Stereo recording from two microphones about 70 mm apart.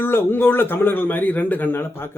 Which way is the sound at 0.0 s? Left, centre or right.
Left.